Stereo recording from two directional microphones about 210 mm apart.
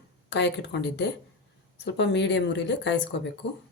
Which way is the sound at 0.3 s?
55° left (ahead or behind).